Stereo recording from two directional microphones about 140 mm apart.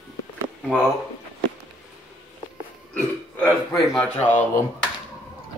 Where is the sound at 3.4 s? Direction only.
20° left (ahead or behind).